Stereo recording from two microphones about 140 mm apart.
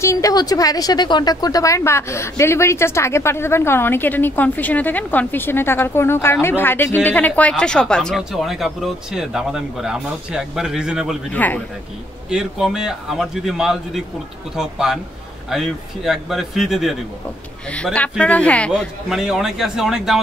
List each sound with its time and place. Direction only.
0.0 s a woman's voice: 25° left (ahead or behind); by 11.1 s 5° right (ahead or behind)
11.3 s speech: 10° left (ahead or behind)
12.3 s speech: 5° right (ahead or behind)
17.7 s speech: 10° left (ahead or behind)
18.7 s speech: centre (ahead or behind)